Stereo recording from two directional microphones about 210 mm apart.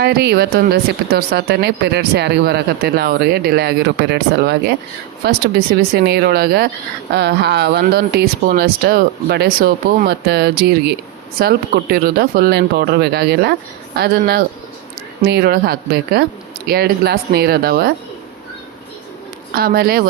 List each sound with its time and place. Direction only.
0.0 s speech: 50° right (ahead or behind)
19.5 s speech: 45° right (ahead or behind)